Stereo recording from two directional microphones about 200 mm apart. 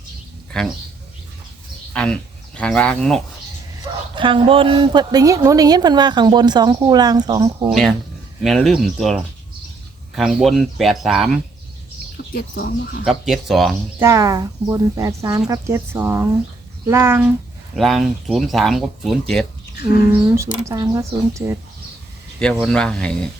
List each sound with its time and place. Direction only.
0.5 s speech: 5° left (ahead or behind)
1.9 s speech: 5° left (ahead or behind)
4.1 s a woman's voice: 25° right (ahead or behind)
7.7 s speech: centre (ahead or behind)
12.1 s speech: 50° left (ahead or behind)
13.1 s speech: centre (ahead or behind)
14.0 s speech: 15° right (ahead or behind)
17.7 s speech: centre (ahead or behind)
20.3 s speech: 15° right (ahead or behind)
22.6 s speech: 5° left (ahead or behind)